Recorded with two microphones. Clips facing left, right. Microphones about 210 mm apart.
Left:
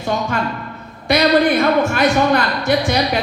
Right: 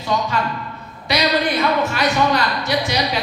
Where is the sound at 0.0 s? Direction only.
50° left (ahead or behind).